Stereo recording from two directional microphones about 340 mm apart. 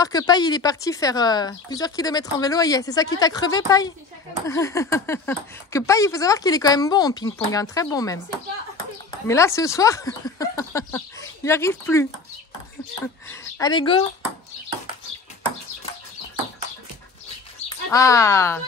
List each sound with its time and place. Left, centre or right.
0.0 s speech: centre
9.3 s speech: centre
17.9 s speech: centre